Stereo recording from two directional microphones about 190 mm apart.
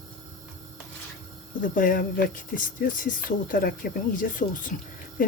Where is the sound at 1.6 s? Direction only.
45° left (ahead or behind).